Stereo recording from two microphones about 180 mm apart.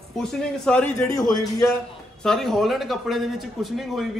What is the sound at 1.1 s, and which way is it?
Speech, 20° left (ahead or behind).